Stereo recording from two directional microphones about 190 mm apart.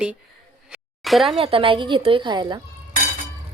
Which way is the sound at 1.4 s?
30° right (ahead or behind).